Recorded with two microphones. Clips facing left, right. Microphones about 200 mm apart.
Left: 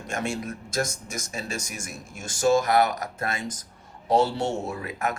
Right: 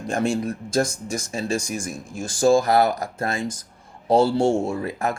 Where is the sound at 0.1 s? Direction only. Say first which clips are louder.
Right 7 dB; 30° right (ahead or behind).